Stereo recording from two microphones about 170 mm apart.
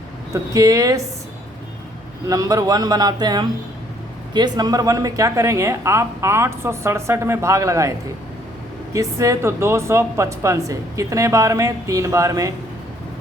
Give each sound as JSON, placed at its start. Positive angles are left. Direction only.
{"t": 0.5, "sound": "speech", "side_deg": -20}
{"t": 2.2, "sound": "speech", "side_deg": -20}